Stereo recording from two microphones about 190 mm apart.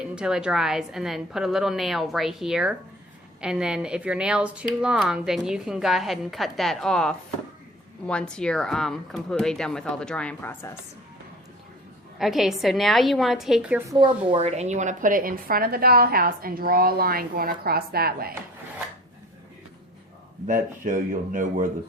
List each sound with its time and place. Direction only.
0.0 s a woman's voice: 5° right (ahead or behind)
12.2 s a woman's voice: centre (ahead or behind)
14.0 s a woman's voice: 30° right (ahead or behind); by 18.3 s 55° right (ahead or behind)
20.5 s a woman's voice: 45° right (ahead or behind)